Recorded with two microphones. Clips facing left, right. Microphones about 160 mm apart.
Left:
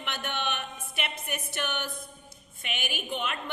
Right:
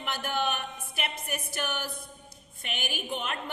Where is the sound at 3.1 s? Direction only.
40° right (ahead or behind).